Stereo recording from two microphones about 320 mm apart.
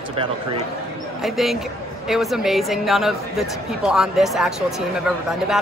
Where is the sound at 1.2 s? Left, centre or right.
Centre.